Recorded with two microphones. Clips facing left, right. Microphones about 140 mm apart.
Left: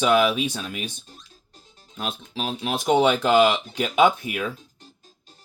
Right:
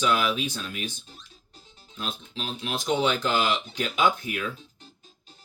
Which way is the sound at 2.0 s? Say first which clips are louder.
Left 5 dB; 65° left (ahead or behind).